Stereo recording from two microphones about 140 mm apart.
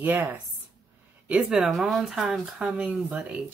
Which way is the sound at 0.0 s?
15° right (ahead or behind).